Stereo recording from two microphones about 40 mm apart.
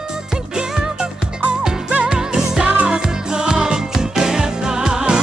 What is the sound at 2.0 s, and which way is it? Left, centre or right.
Music, centre.